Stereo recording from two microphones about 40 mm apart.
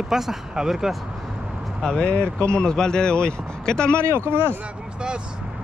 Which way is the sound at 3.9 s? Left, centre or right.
Right.